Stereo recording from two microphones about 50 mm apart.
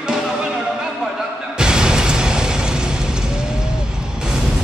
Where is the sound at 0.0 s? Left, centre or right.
Centre.